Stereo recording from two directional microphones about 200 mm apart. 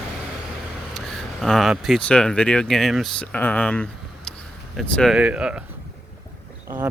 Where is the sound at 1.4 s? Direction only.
Centre (ahead or behind).